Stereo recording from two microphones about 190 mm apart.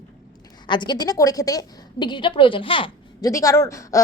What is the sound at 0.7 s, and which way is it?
A woman's voice, 25° left (ahead or behind).